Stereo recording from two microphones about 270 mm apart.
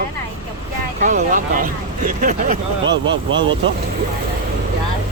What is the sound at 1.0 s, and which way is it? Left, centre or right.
Speech, right.